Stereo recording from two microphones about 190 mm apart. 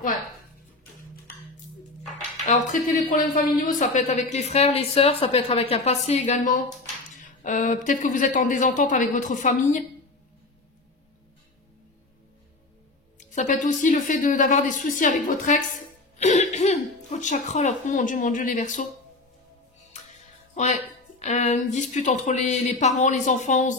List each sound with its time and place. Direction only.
2.4 s a woman's voice: 40° left (ahead or behind)
13.2 s speech: 40° left (ahead or behind)
19.9 s music: 40° left (ahead or behind)
21.2 s a woman's voice: 40° left (ahead or behind)